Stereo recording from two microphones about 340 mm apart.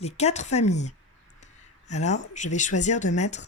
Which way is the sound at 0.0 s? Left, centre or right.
Centre.